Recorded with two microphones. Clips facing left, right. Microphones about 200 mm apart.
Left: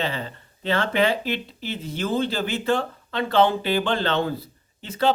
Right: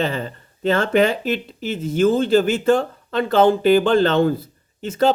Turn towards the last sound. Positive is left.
turn(degrees=-45)  # may be behind; listen again after turning